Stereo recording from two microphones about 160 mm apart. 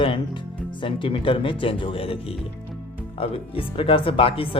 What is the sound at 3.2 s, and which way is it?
Speech, 35° left (ahead or behind).